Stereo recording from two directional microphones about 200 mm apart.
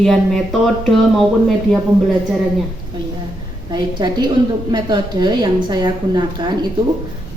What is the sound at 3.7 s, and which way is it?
A woman's voice, 20° right (ahead or behind).